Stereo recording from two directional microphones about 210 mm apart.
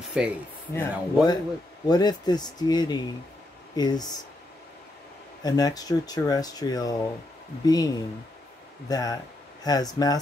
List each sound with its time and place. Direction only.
0.2 s speech: 5° right (ahead or behind)
0.7 s speech: 20° left (ahead or behind)
5.4 s speech: 20° left (ahead or behind)